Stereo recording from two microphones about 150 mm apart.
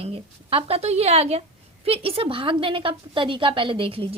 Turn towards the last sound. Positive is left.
turn(degrees=-35)  # may be behind; listen again after turning